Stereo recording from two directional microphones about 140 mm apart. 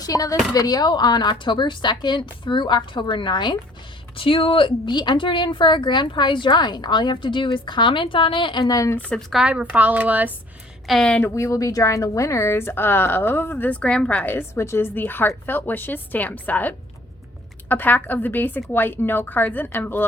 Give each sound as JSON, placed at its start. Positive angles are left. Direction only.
{"t": 0.0, "sound": "a woman's voice", "side_deg": 25}
{"t": 8.6, "sound": "speech", "side_deg": 25}
{"t": 9.0, "sound": "a woman's voice", "side_deg": 10}
{"t": 9.3, "sound": "a woman's voice", "side_deg": -5}
{"t": 10.8, "sound": "a woman's voice", "side_deg": 5}
{"t": 11.2, "sound": "a woman's voice", "side_deg": 20}